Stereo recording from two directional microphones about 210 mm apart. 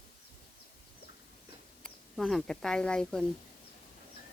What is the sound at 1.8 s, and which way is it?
Speech, centre (ahead or behind).